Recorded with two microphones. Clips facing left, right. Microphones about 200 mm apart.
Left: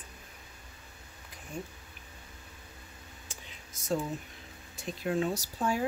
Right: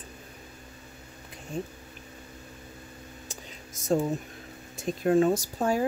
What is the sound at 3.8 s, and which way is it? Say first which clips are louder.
Speech: right 6 dB; 45° right (ahead or behind).